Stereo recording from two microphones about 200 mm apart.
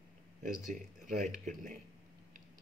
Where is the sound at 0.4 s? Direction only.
40° right (ahead or behind).